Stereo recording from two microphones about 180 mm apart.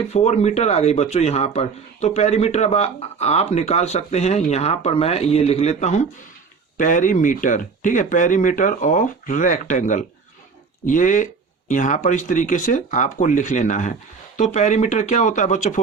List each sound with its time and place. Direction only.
0.1 s speech: 40° left (ahead or behind)